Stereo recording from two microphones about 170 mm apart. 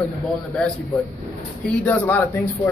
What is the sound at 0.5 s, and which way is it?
Speech, centre (ahead or behind).